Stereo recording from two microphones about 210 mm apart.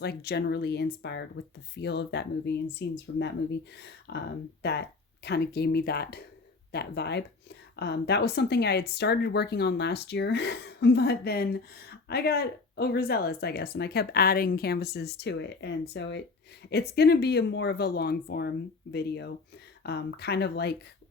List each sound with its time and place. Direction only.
0.0 s speech: 50° left (ahead or behind)